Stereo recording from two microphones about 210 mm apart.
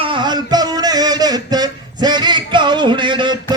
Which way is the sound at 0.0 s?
20° right (ahead or behind).